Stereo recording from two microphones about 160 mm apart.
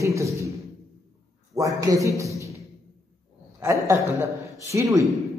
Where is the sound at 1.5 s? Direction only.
20° right (ahead or behind).